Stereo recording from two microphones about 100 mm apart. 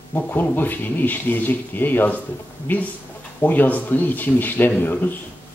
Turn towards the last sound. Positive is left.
turn(degrees=20)  # may be behind; listen again after turning